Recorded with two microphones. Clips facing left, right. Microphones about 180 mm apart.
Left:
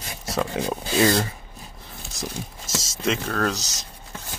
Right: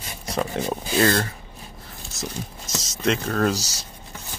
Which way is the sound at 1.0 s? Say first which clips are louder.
Left 1 dB; 15° left (ahead or behind).